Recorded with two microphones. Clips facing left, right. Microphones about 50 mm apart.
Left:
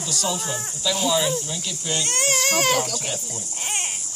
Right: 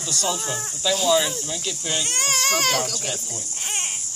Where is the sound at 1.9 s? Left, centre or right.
Centre.